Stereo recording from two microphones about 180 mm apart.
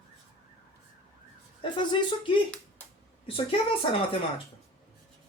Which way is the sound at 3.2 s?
30° left (ahead or behind).